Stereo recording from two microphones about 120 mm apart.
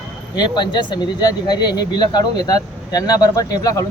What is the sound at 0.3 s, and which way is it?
Speech, 40° left (ahead or behind).